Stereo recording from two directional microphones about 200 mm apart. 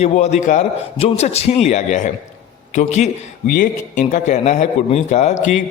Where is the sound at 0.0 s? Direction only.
35° left (ahead or behind).